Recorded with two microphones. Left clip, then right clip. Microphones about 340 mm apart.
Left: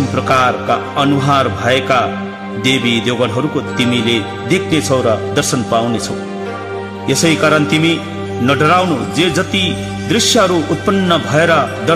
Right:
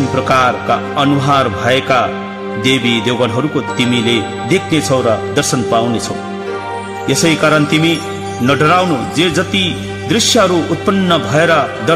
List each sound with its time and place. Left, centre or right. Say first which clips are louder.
0.1 s a man's voice: right 1 dB; left
7.1 s a man's voice: even; left